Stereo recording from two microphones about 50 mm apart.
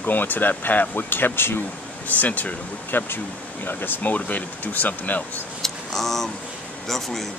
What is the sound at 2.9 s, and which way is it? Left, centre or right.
Speech, left.